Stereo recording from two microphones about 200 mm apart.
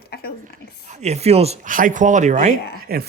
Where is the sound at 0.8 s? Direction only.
35° right (ahead or behind).